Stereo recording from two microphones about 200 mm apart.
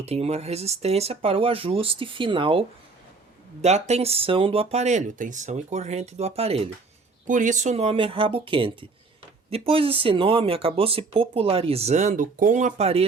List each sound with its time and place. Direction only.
0.0 s speech: 30° right (ahead or behind)